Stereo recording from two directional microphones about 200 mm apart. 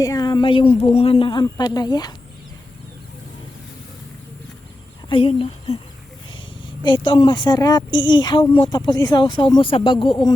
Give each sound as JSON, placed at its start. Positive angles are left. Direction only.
{"t": 0.0, "sound": "speech", "side_deg": 20}
{"t": 5.0, "sound": "speech", "side_deg": 25}
{"t": 6.8, "sound": "speech", "side_deg": 25}